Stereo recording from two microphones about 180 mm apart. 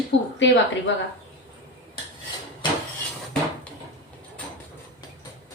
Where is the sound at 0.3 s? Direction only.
90° left.